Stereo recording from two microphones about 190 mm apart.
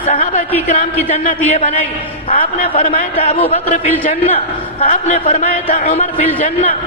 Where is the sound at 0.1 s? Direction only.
45° left (ahead or behind).